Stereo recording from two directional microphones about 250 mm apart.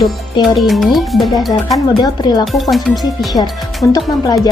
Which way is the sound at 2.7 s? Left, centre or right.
Centre.